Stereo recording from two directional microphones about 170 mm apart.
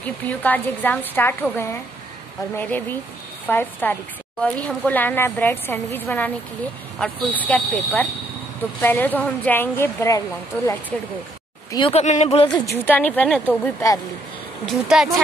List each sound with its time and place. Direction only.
0.0 s a woman's voice: 10° left (ahead or behind)
11.7 s speech: 30° left (ahead or behind)
12.0 s speech: 40° left (ahead or behind)
12.8 s a woman's voice: 10° left (ahead or behind)
14.7 s speech: centre (ahead or behind)